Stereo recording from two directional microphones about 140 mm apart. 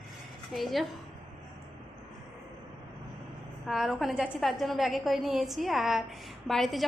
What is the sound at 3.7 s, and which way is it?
A woman's voice, centre (ahead or behind).